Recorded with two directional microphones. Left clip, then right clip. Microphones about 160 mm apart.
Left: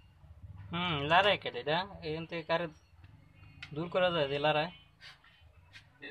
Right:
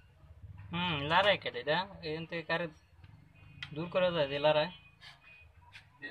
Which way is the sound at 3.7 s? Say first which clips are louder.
Left 1 dB; 30° left (ahead or behind).